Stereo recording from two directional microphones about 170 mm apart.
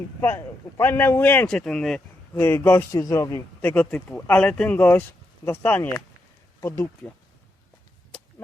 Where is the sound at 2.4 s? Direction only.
15° left (ahead or behind).